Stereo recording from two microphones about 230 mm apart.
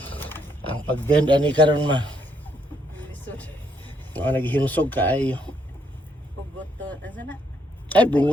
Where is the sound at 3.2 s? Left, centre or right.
Centre.